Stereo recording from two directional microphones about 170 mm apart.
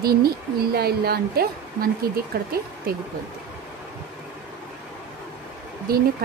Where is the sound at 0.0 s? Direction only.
65° right (ahead or behind).